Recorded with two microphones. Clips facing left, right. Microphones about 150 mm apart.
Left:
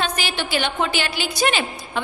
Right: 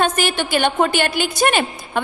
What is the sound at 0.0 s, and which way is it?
A woman's voice, 50° right (ahead or behind).